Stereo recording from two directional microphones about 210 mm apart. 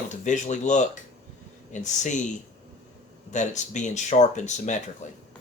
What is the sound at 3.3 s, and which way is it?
Speech, 35° left (ahead or behind).